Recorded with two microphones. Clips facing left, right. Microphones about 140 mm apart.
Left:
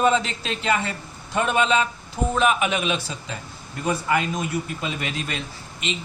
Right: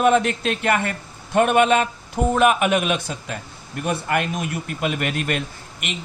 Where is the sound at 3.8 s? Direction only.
70° right (ahead or behind).